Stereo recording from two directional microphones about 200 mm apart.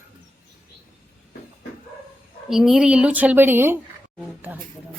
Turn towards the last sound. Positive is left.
turn(degrees=-10)  # may be behind; listen again after turning